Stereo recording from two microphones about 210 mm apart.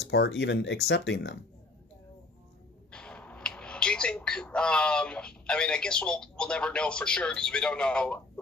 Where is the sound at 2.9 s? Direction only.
5° left (ahead or behind).